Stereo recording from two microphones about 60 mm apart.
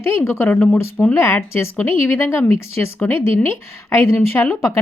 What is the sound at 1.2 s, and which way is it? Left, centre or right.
Speech, left.